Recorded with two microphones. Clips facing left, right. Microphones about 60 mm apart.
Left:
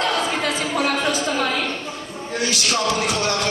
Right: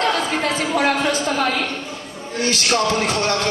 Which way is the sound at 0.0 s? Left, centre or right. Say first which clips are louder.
Right 2 dB; right.